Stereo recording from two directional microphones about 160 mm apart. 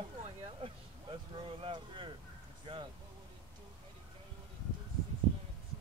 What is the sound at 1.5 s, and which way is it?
Speech, 35° right (ahead or behind).